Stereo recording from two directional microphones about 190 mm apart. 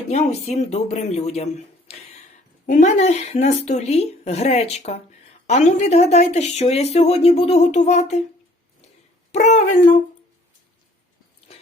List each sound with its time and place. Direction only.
0.1 s speech: 35° left (ahead or behind)
9.3 s speech: 35° left (ahead or behind)